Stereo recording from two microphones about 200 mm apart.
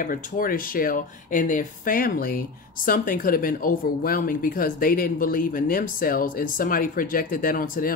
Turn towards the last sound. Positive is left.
turn(degrees=45)  # may be behind; listen again after turning